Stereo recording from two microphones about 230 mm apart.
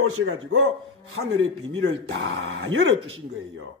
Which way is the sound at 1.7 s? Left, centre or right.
Right.